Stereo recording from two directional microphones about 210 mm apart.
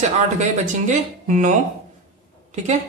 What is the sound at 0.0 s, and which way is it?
Speech, 35° right (ahead or behind).